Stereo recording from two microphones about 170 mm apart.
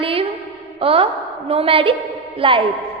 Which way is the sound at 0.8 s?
35° right (ahead or behind).